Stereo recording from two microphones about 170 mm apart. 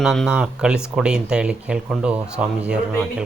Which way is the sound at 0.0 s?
Centre (ahead or behind).